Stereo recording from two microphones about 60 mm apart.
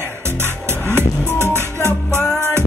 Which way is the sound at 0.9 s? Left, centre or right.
Right.